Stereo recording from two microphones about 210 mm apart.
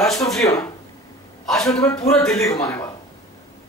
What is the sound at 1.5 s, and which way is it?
Speech, centre (ahead or behind).